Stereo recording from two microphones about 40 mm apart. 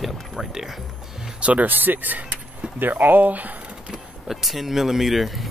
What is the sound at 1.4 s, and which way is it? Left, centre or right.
Speech, right.